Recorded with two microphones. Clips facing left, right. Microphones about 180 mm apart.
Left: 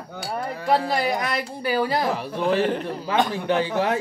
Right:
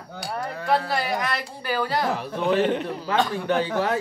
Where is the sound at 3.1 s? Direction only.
20° left (ahead or behind).